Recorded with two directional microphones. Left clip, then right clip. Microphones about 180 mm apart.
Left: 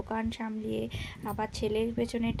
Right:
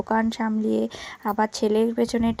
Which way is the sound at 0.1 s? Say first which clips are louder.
Right 11 dB; 35° right (ahead or behind).